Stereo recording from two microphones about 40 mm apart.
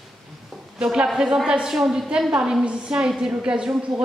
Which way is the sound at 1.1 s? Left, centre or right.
Centre.